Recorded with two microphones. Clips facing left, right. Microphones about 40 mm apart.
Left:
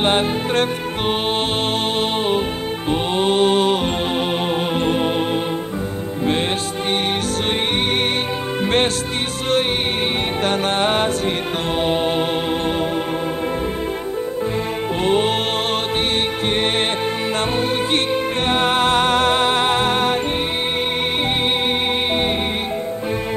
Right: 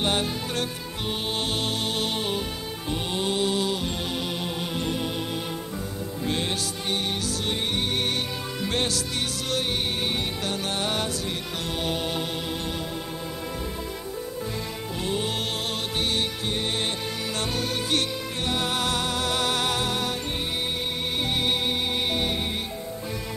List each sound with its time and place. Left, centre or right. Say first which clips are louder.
0.0 s music: left 8 dB; left
8.6 s music: left 9 dB; left
10.4 s music: left 10 dB; left
15.0 s music: left 11 dB; left
18.5 s music: left 9 dB; left